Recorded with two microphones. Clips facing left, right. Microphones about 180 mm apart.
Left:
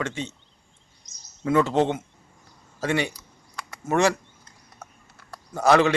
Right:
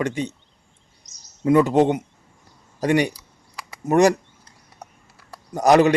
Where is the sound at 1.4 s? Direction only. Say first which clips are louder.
Right 5 dB; 15° right (ahead or behind).